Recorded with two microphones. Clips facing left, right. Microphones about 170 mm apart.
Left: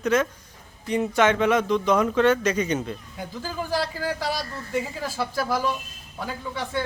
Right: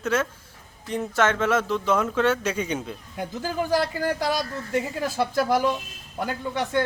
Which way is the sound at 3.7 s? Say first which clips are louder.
Right 2 dB; 50° right (ahead or behind).